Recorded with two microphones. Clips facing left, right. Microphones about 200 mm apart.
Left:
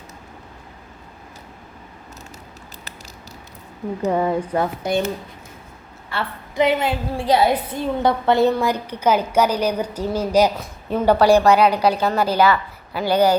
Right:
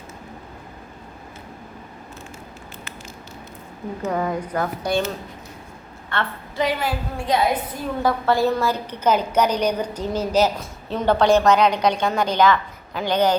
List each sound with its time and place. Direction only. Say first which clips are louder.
4.1 s speech: left 4 dB; 30° left (ahead or behind)
6.6 s a woman's voice: left 4 dB; 20° left (ahead or behind)